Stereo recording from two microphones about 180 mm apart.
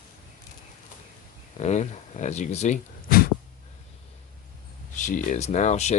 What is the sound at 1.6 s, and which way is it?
Speech, 40° left (ahead or behind).